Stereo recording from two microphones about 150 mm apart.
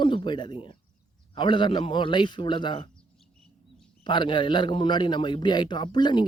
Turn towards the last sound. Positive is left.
turn(degrees=30)  # may be behind; listen again after turning